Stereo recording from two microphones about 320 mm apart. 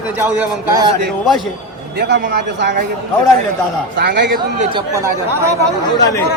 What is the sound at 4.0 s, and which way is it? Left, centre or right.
Speech, right.